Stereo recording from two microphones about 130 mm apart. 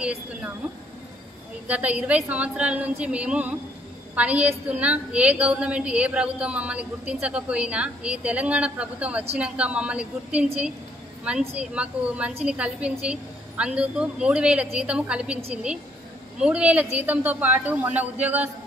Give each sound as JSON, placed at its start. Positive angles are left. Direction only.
{"t": 0.0, "sound": "a woman's voice", "side_deg": -10}
{"t": 1.7, "sound": "a woman's voice", "side_deg": -10}